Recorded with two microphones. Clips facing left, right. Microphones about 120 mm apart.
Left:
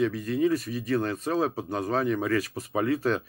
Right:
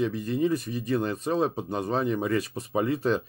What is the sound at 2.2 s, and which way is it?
Speech, 25° right (ahead or behind).